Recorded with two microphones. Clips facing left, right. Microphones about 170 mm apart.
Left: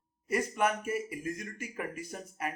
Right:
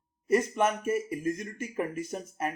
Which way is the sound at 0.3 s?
25° right (ahead or behind).